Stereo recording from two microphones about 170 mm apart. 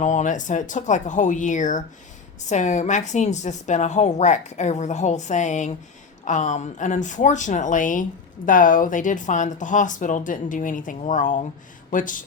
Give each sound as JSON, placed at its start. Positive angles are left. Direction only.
{"t": 0.0, "sound": "a woman's voice", "side_deg": 45}